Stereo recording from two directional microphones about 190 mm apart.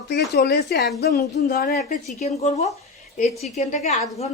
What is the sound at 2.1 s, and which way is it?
Speech, 35° left (ahead or behind).